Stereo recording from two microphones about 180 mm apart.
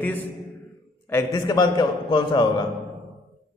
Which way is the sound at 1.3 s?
25° left (ahead or behind).